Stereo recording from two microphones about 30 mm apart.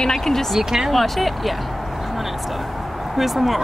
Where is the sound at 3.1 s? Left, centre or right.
Centre.